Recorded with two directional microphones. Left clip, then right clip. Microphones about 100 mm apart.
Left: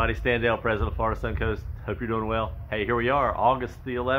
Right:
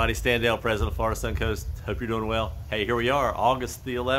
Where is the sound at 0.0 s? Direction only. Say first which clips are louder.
Right 1 dB; 20° right (ahead or behind).